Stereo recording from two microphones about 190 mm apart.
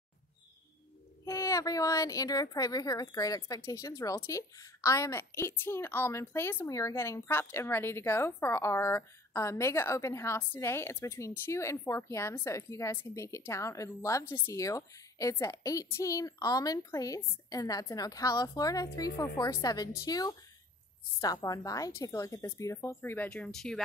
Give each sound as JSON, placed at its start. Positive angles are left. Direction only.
{"t": 1.2, "sound": "speech", "side_deg": 15}